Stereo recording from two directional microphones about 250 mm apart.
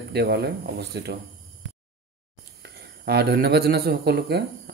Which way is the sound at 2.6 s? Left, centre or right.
Right.